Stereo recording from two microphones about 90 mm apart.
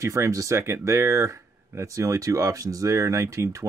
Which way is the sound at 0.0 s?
35° right (ahead or behind).